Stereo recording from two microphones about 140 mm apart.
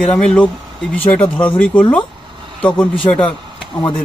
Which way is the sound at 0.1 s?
10° left (ahead or behind).